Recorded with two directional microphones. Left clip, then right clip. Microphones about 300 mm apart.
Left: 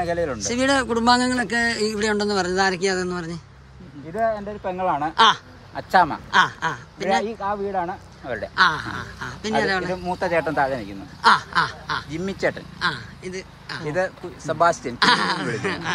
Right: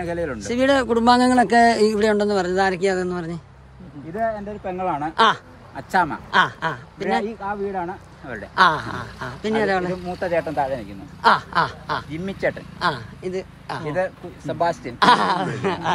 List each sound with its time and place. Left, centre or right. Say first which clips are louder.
0.0 s speech: left 2 dB; centre
0.4 s speech: right 5 dB; centre
4.2 s speech: left 2 dB; centre
5.1 s speech: left 1 dB; centre
5.8 s speech: left 3 dB; centre
6.3 s speech: right 1 dB; centre
7.2 s speech: left 1 dB; left
8.5 s speech: right 2 dB; centre
10.0 s speech: left 1 dB; left
11.2 s speech: even; centre
12.1 s speech: even; centre
12.7 s speech: right 2 dB; centre
13.8 s speech: even; centre
15.0 s speech: right 6 dB; centre